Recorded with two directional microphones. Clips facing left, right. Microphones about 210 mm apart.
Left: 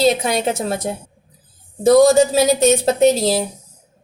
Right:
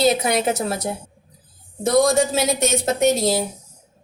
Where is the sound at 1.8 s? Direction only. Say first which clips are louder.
Left 6 dB; 30° left (ahead or behind).